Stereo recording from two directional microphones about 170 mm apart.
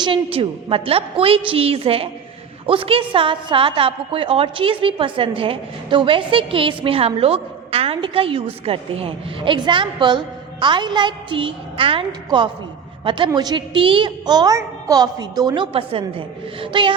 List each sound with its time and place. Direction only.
0.0 s a woman's voice: 30° right (ahead or behind)